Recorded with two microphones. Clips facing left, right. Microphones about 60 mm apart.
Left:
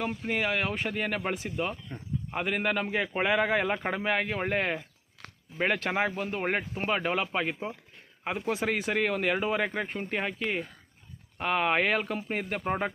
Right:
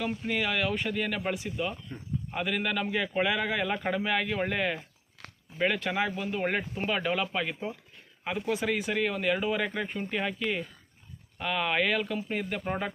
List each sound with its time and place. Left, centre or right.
0.0 s speech: left
5.5 s speech: left
6.4 s speech: left
6.7 s speech: left